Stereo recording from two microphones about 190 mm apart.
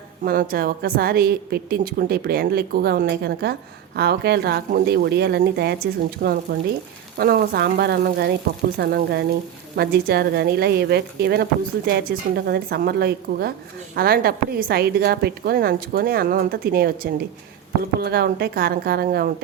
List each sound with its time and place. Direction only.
0.2 s a woman's voice: 50° right (ahead or behind)